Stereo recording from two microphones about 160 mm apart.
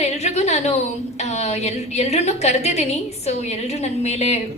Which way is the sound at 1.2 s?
45° left (ahead or behind).